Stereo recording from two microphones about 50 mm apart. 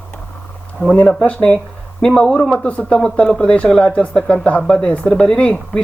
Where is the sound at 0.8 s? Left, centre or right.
Left.